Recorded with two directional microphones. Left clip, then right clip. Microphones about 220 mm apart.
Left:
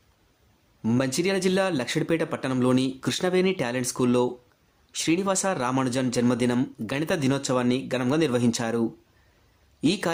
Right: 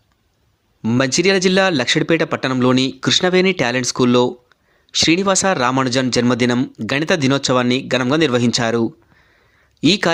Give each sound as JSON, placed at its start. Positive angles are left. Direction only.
{"t": 0.8, "sound": "speech", "side_deg": -20}